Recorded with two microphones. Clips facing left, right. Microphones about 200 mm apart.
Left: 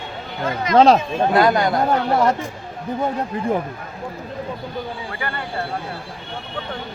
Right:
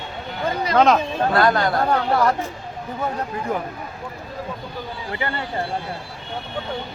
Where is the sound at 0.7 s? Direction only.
35° left (ahead or behind).